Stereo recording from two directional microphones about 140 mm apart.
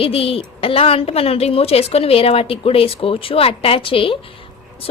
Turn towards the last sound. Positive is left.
turn(degrees=40)  # may be behind; listen again after turning